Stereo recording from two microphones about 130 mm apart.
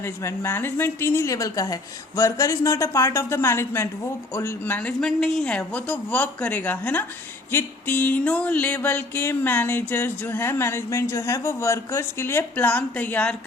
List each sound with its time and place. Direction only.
0.0 s a woman's voice: 20° left (ahead or behind)
7.5 s music: 15° left (ahead or behind)